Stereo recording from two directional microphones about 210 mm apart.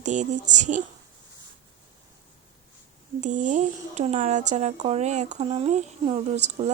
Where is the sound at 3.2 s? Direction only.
35° right (ahead or behind).